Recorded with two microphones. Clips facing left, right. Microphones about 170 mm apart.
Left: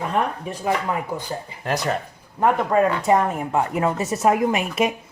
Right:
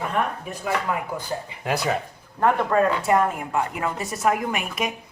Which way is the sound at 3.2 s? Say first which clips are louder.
Left 1 dB; 30° left (ahead or behind).